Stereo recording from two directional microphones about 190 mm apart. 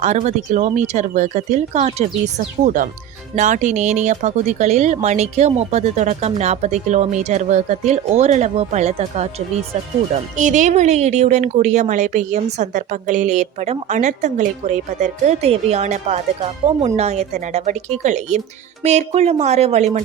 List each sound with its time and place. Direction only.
0.0 s speech: 40° right (ahead or behind)
10.3 s speech: 40° right (ahead or behind)